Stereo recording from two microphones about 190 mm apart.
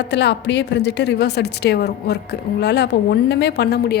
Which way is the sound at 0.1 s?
65° left (ahead or behind).